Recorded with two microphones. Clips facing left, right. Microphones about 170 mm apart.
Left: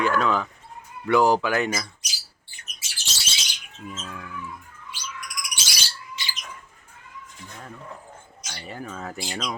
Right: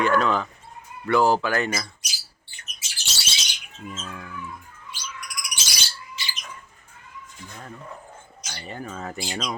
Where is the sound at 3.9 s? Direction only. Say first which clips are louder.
Even; centre (ahead or behind).